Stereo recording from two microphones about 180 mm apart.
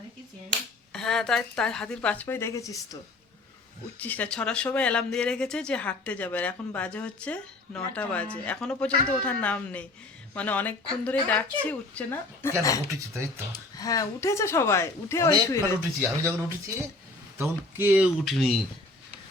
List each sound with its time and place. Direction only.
0.9 s speech: centre (ahead or behind); by 12.8 s 20° left (ahead or behind)
12.9 s speech: 15° right (ahead or behind)
13.7 s speech: 20° left (ahead or behind)
15.8 s speech: 10° right (ahead or behind)